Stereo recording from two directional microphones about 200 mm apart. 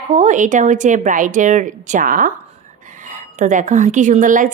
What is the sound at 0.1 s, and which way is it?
A woman's voice, 40° right (ahead or behind).